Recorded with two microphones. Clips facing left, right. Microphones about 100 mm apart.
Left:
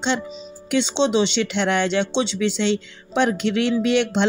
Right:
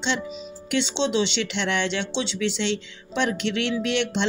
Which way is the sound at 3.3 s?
60° right (ahead or behind).